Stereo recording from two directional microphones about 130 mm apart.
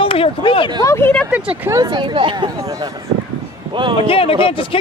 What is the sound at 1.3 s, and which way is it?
Speech, 15° right (ahead or behind).